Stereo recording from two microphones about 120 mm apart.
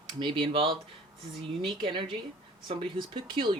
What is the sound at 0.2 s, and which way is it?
Speech, 45° right (ahead or behind).